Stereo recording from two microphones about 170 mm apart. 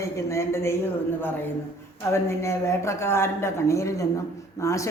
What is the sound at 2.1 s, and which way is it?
Speech, 15° left (ahead or behind).